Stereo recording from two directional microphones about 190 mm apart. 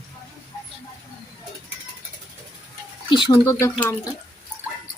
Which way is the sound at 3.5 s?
15° left (ahead or behind).